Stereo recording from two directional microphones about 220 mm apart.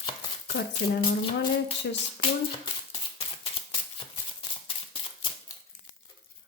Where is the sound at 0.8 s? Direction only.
55° left (ahead or behind).